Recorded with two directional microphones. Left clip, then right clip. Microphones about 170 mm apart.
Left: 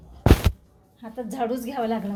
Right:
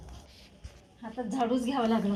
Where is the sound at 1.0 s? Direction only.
45° left (ahead or behind).